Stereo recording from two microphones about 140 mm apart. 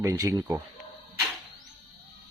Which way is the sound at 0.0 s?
20° right (ahead or behind).